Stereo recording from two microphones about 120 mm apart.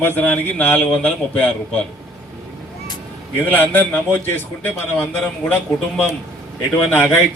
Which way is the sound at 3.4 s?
15° left (ahead or behind).